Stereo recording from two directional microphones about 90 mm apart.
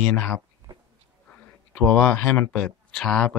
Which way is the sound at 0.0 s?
15° left (ahead or behind).